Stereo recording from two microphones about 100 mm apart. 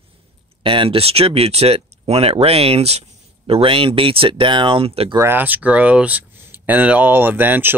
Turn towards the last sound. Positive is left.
turn(degrees=-20)  # may be behind; listen again after turning